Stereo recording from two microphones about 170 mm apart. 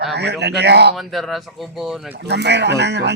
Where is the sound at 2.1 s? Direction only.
80° right.